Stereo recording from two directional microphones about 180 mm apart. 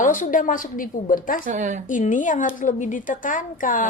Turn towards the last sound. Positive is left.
turn(degrees=50)  # may be behind; listen again after turning